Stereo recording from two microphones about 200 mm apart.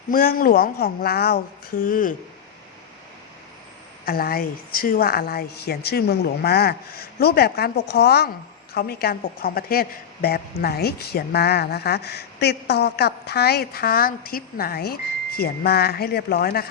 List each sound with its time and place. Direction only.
0.1 s a woman's voice: 45° left (ahead or behind)
4.0 s a woman's voice: 50° left (ahead or behind)